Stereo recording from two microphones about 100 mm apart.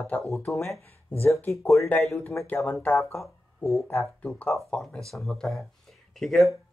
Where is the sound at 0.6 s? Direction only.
25° left (ahead or behind).